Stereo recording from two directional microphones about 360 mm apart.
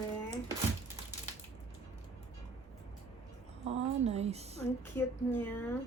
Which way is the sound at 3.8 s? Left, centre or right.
Centre.